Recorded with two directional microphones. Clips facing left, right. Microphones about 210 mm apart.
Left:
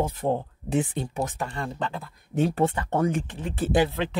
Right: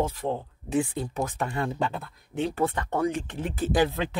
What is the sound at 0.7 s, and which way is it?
Speech, 25° left (ahead or behind).